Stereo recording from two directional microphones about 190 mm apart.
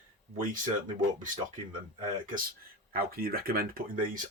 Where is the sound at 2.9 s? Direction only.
50° right (ahead or behind).